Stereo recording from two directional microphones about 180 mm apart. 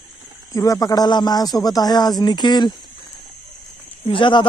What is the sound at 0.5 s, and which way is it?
A man's voice, 20° left (ahead or behind).